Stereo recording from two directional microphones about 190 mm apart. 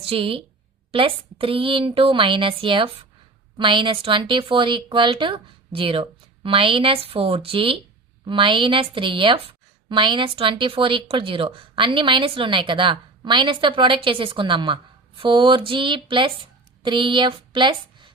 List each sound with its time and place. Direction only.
0.0 s a woman's voice: 30° right (ahead or behind)